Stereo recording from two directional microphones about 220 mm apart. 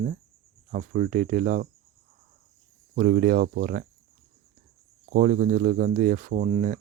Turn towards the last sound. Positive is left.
turn(degrees=-35)  # may be behind; listen again after turning